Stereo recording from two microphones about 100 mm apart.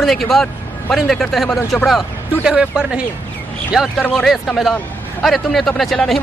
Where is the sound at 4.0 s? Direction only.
10° left (ahead or behind).